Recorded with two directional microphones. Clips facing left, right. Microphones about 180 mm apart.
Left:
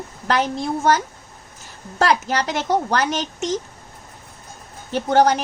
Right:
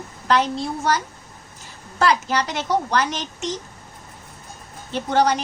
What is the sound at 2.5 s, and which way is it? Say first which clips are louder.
Speech: left 2 dB; 50° left (ahead or behind).